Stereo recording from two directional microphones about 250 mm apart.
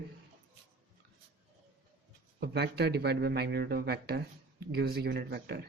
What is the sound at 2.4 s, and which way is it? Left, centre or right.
A man's voice, right.